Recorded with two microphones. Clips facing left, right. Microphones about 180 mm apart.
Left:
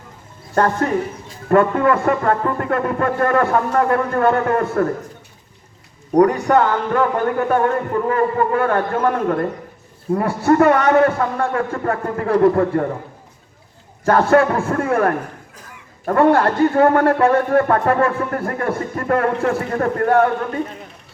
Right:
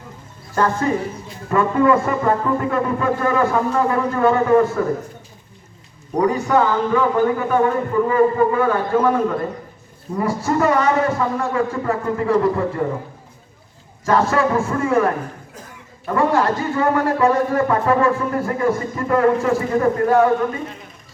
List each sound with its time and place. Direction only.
0.5 s a man's voice: 60° left (ahead or behind)
6.1 s a man's voice: 60° left (ahead or behind)
14.0 s a man's voice: 60° left (ahead or behind)